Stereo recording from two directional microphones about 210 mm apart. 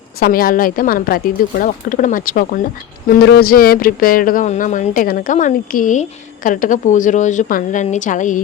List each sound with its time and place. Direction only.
0.2 s speech: 45° left (ahead or behind)